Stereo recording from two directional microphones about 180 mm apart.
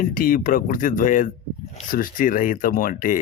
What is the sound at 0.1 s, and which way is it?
Speech, 50° left (ahead or behind).